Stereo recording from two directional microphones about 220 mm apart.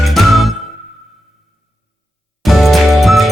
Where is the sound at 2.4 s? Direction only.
Centre (ahead or behind).